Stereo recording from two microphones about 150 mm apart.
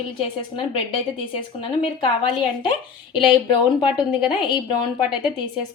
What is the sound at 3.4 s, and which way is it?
Speech, 30° left (ahead or behind).